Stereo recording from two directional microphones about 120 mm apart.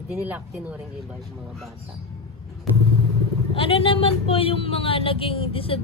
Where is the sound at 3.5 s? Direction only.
50° left (ahead or behind).